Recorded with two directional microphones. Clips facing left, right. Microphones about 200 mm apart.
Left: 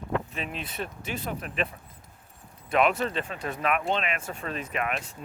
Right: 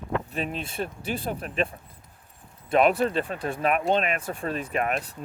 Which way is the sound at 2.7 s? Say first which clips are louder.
Right 3 dB; 35° right (ahead or behind).